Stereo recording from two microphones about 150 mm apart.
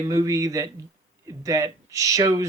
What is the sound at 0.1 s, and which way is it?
Speech, 20° right (ahead or behind).